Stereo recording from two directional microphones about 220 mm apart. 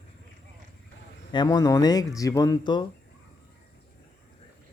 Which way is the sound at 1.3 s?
20° left (ahead or behind).